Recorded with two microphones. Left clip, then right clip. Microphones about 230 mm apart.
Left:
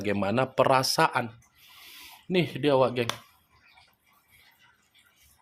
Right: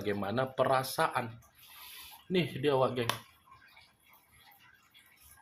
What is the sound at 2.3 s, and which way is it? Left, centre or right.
Speech, left.